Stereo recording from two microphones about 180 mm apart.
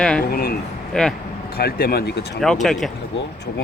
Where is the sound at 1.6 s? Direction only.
55° left (ahead or behind).